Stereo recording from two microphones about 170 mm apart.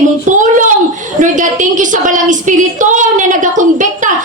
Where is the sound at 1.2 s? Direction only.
50° right (ahead or behind).